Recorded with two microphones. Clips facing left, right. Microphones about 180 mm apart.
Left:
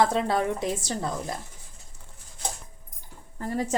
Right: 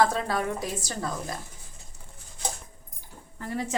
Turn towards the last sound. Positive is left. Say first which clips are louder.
# left 3 dB
turn(degrees=40)  # may be behind; listen again after turning